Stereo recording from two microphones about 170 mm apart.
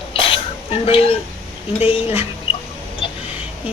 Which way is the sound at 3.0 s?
30° left (ahead or behind).